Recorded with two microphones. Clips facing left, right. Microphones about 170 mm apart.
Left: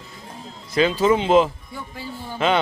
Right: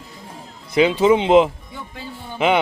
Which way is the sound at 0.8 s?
20° right (ahead or behind).